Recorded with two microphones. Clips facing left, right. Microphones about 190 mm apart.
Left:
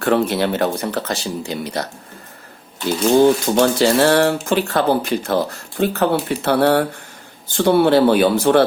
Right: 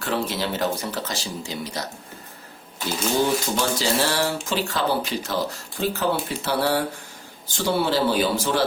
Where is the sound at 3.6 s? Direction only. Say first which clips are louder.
Left 9 dB; 60° left (ahead or behind).